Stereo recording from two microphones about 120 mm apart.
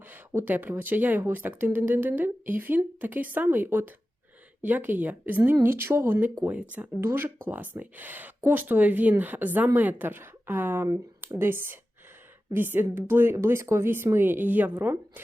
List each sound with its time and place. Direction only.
0.1 s speech: 15° right (ahead or behind)